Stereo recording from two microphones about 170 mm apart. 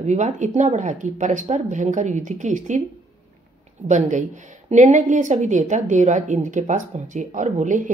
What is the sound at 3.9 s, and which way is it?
A woman's voice, 45° right (ahead or behind).